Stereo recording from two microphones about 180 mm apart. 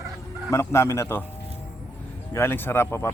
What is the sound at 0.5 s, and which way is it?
Speech, 15° left (ahead or behind).